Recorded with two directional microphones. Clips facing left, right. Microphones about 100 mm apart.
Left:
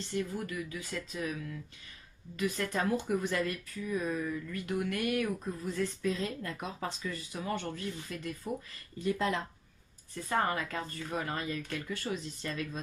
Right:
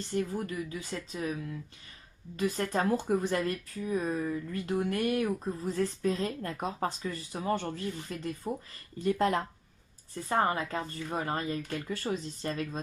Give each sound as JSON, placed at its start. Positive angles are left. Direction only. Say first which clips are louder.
{"t": 0.1, "sound": "speech", "louder": "right 3 dB", "side_deg": -30}
{"t": 9.0, "sound": "speech", "louder": "right 4 dB", "side_deg": -50}
{"t": 10.2, "sound": "speech", "louder": "right 3 dB", "side_deg": -25}